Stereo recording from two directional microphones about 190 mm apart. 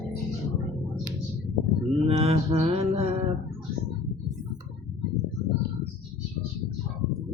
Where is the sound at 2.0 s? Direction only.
30° right (ahead or behind).